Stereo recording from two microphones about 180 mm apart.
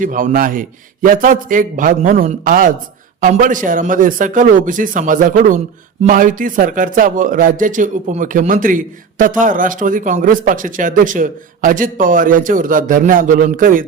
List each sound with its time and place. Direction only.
0.0 s speech: 50° right (ahead or behind)